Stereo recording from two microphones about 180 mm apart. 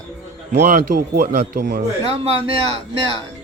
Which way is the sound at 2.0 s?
35° right (ahead or behind).